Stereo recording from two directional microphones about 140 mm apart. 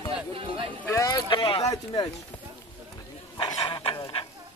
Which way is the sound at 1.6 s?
25° left (ahead or behind).